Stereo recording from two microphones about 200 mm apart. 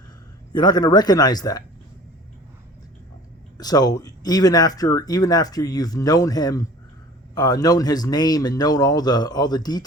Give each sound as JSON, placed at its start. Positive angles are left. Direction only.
{"t": 0.5, "sound": "speech", "side_deg": 20}
{"t": 3.6, "sound": "speech", "side_deg": 20}